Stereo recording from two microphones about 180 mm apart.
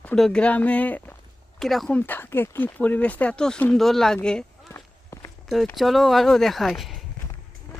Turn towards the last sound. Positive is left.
turn(degrees=0)  # may be behind; listen again after turning